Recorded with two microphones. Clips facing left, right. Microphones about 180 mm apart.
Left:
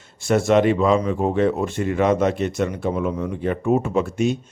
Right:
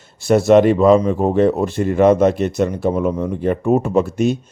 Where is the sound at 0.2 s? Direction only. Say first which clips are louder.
Right 5 dB; 35° right (ahead or behind).